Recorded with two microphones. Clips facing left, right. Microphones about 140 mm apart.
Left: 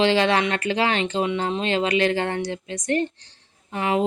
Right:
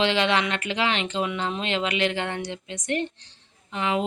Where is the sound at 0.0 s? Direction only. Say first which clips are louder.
Left 4 dB; 35° left (ahead or behind).